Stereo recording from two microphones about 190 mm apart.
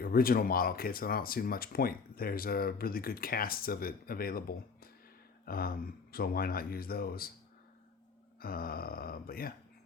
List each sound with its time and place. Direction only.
0.0 s speech: 50° left (ahead or behind)
8.4 s speech: 50° left (ahead or behind)